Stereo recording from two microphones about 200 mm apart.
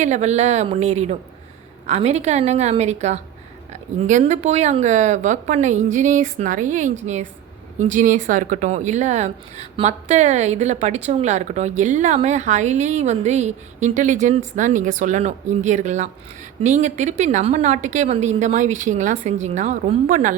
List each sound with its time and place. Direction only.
0.0 s speech: 35° right (ahead or behind)